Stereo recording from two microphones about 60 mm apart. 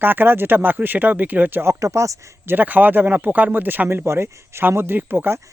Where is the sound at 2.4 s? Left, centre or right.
Right.